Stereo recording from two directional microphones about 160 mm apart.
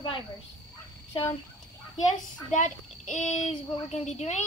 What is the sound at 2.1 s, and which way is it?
Speech, 50° left (ahead or behind).